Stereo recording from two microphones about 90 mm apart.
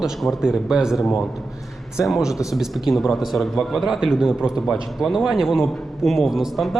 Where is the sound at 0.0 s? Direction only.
5° right (ahead or behind).